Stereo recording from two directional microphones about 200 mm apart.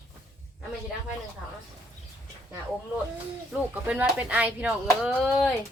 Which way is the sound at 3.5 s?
5° right (ahead or behind).